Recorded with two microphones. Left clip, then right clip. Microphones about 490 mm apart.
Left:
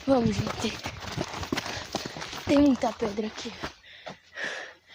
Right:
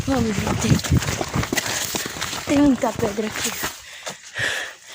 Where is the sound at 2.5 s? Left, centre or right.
Left.